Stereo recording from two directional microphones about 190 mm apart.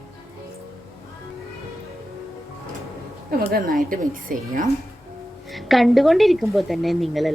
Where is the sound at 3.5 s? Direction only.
50° right (ahead or behind).